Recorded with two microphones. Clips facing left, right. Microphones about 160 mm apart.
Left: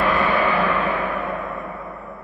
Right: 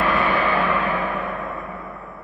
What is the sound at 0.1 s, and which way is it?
Gong, 40° left (ahead or behind).